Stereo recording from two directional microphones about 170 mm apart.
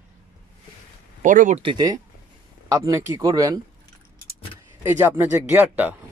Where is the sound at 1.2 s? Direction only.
50° right (ahead or behind).